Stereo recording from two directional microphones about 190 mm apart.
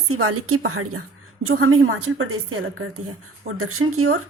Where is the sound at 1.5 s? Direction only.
90° right.